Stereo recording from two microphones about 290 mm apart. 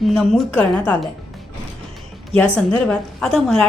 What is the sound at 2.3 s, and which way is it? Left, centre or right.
A woman's voice, centre.